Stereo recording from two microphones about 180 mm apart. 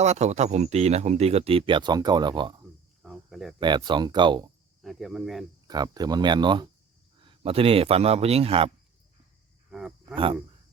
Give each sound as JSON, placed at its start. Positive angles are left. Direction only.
{"t": 0.0, "sound": "speech", "side_deg": -40}
{"t": 3.0, "sound": "a sound", "side_deg": 0}
{"t": 3.6, "sound": "speech", "side_deg": -25}
{"t": 4.8, "sound": "speech", "side_deg": 0}
{"t": 5.6, "sound": "speech", "side_deg": -20}
{"t": 9.7, "sound": "cricket", "side_deg": -5}